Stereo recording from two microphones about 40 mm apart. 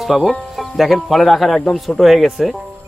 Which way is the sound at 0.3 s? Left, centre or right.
Centre.